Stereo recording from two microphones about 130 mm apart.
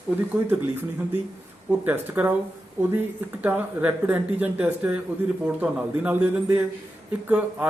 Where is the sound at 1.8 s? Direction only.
15° right (ahead or behind).